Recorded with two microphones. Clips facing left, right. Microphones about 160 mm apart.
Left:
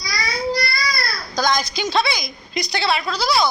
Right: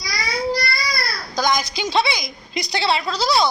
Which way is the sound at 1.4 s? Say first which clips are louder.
Even; 20° right (ahead or behind).